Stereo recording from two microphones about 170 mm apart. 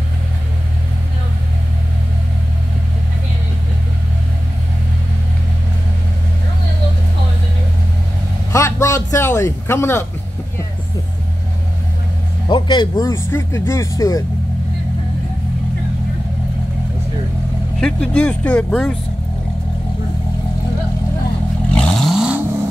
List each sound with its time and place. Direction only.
8.5 s a man's voice: 15° left (ahead or behind)
12.4 s speech: 25° left (ahead or behind)
17.7 s speech: 5° left (ahead or behind)
21.7 s vehicle: centre (ahead or behind)